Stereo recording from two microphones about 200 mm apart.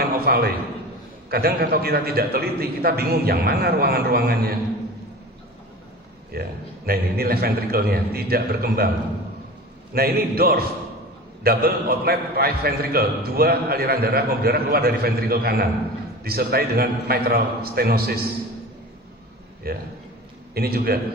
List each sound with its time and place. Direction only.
0.0 s a sound: 50° right (ahead or behind)
1.3 s a man's voice: 50° right (ahead or behind)
6.3 s a man's voice: 50° right (ahead or behind)
9.9 s a man's voice: 50° right (ahead or behind)
19.6 s a man's voice: 50° right (ahead or behind)